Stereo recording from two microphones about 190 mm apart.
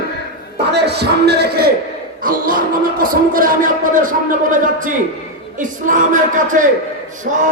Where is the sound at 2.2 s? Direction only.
45° right (ahead or behind).